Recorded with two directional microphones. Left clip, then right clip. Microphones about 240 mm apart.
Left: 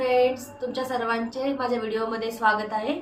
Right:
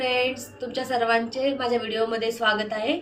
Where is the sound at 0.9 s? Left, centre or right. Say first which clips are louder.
Right 7 dB; centre.